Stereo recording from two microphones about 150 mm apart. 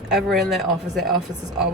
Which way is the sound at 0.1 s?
Centre (ahead or behind).